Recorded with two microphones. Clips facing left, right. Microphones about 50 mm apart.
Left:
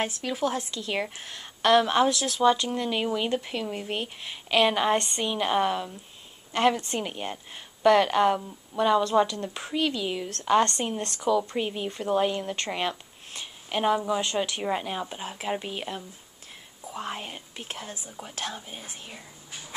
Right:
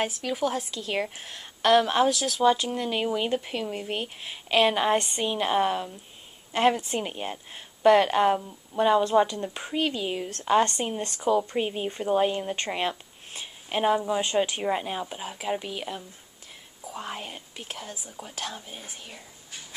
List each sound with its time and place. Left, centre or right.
0.0 s a woman's voice: centre
14.2 s speech: right
14.6 s a woman's voice: centre